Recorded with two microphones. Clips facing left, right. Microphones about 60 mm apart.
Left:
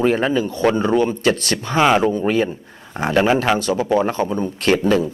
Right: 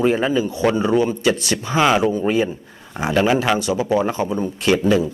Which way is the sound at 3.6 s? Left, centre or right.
Left.